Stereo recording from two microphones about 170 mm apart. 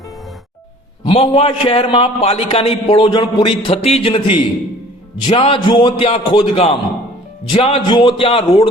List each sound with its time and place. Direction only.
1.0 s a man's voice: 35° left (ahead or behind)